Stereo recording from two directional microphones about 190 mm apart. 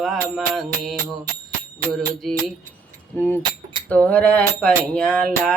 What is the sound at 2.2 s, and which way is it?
Music, centre (ahead or behind).